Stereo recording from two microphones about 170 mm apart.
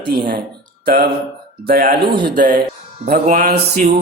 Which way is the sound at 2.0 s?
30° right (ahead or behind).